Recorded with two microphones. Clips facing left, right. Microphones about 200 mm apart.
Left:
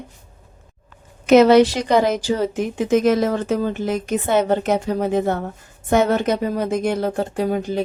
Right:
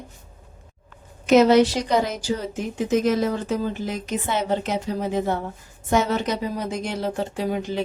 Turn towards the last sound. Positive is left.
turn(degrees=45)  # may be behind; listen again after turning